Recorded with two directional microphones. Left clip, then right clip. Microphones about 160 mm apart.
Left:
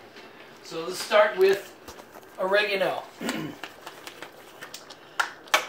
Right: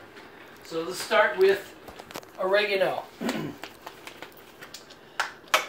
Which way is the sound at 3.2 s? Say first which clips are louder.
Right 1 dB; 30° right (ahead or behind).